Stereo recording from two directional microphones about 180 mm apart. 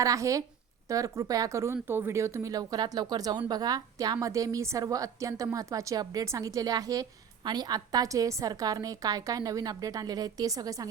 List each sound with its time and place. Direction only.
0.0 s a woman's voice: 20° right (ahead or behind)